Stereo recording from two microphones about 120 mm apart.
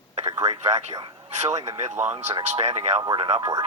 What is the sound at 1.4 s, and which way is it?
Speech, 70° right (ahead or behind).